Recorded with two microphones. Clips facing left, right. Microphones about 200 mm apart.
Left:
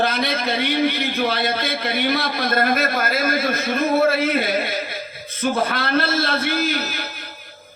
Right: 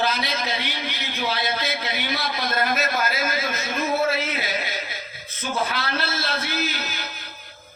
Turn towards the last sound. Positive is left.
turn(degrees=55)  # may be behind; listen again after turning